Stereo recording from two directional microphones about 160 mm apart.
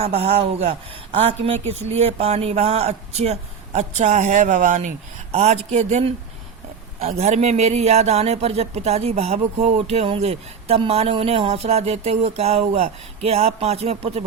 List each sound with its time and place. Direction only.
0.0 s a man's voice: 40° right (ahead or behind)